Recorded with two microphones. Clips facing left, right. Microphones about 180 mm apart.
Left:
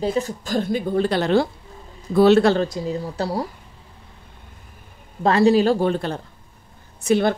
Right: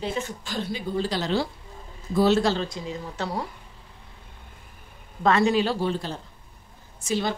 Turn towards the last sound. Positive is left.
turn(degrees=60)  # may be behind; listen again after turning